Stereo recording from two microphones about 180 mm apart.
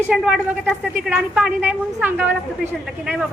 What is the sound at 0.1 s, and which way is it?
A woman's voice, 5° right (ahead or behind).